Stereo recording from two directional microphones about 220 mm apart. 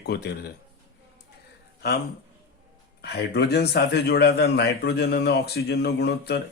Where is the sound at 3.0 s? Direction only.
45° left (ahead or behind).